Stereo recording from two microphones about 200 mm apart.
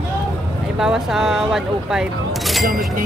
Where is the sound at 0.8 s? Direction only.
Centre (ahead or behind).